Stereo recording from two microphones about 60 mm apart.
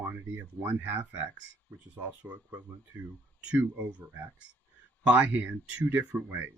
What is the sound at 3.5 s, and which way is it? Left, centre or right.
Speech, right.